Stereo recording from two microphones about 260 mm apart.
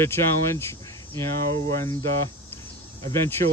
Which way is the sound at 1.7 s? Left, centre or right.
Centre.